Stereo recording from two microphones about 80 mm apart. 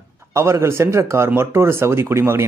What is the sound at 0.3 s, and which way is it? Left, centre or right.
Speech, right.